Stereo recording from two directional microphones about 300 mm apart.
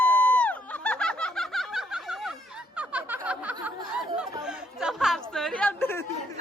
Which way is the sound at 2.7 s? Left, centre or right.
Centre.